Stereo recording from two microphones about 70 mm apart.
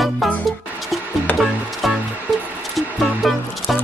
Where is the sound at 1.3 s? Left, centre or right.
Left.